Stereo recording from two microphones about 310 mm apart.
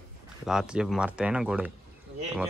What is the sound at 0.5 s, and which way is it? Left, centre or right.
A man's voice, centre.